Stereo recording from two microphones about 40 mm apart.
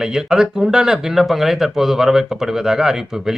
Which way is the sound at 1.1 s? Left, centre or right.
Centre.